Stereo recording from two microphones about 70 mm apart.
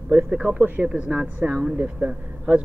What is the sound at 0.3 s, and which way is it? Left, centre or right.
Speech, centre.